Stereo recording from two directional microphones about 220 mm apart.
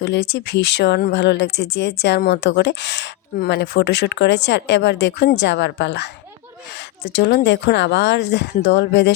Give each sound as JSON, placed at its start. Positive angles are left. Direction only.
{"t": 0.0, "sound": "speech", "side_deg": 50}